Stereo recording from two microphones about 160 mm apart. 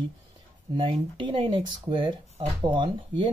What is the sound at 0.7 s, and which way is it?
Speech, 30° right (ahead or behind).